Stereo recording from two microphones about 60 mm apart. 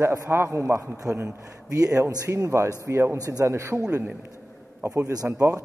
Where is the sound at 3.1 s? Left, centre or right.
Right.